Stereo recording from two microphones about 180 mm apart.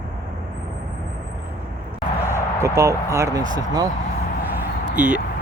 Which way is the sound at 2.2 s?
15° right (ahead or behind).